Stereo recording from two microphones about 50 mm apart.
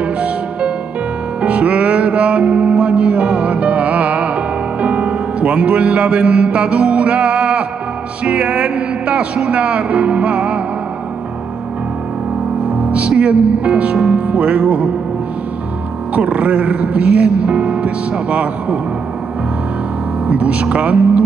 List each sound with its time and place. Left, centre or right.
0.0 s music: right
8.2 s speech: right
12.6 s music: right
13.2 s speech: right
16.2 s speech: right
20.2 s speech: right